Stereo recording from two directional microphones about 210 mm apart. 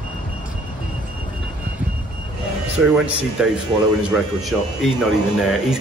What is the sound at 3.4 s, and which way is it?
Speech, 5° right (ahead or behind).